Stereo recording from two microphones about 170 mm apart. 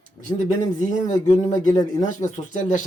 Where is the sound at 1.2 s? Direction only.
45° left (ahead or behind).